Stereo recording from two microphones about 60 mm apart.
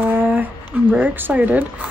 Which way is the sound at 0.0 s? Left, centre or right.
Right.